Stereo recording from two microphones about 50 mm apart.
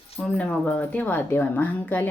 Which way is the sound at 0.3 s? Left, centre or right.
Left.